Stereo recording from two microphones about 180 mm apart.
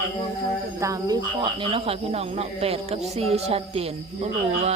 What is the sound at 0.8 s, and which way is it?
Speech, 20° right (ahead or behind).